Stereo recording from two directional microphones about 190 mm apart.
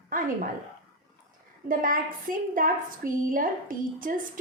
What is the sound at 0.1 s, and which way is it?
Speech, 45° right (ahead or behind).